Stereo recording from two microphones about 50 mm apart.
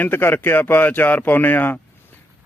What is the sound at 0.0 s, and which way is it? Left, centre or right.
A man's voice, left.